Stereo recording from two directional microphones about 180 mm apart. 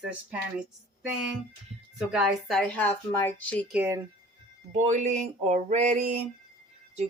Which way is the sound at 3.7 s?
10° right (ahead or behind).